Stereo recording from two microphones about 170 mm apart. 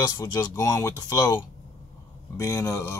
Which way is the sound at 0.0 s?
25° left (ahead or behind).